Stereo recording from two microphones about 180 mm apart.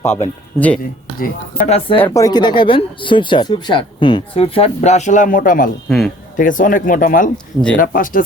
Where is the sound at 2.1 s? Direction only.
20° left (ahead or behind).